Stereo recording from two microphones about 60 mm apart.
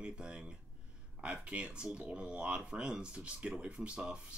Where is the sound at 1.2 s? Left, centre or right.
Right.